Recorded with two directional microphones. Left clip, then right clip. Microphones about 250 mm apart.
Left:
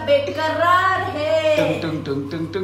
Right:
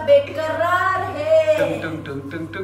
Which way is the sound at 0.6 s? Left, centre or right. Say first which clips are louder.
Left 3 dB; centre.